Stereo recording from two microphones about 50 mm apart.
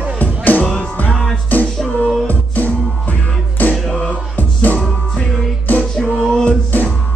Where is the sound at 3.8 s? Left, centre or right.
Centre.